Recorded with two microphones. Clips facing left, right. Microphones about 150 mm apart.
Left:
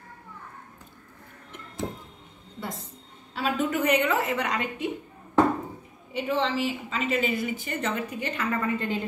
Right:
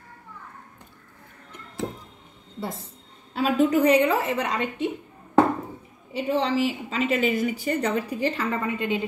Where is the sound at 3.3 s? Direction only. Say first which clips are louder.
Right 6 dB; 40° right (ahead or behind).